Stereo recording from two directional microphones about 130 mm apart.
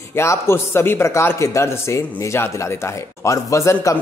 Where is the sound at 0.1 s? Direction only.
20° left (ahead or behind).